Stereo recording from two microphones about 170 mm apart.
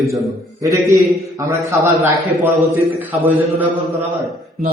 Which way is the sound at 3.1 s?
10° right (ahead or behind).